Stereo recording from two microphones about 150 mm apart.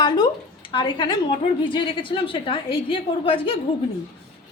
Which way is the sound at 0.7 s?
30° left (ahead or behind).